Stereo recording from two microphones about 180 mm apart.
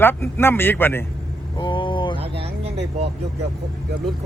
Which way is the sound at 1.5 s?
25° left (ahead or behind).